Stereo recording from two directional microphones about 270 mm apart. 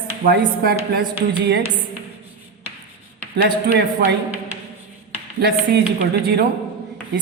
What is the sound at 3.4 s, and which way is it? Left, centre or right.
Speech, right.